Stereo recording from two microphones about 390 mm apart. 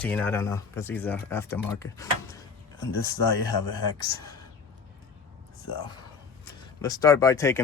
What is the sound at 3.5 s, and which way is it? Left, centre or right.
Speech, left.